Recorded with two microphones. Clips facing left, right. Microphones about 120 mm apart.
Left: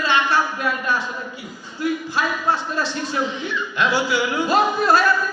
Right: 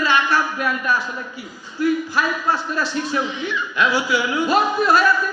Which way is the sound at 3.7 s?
30° left (ahead or behind).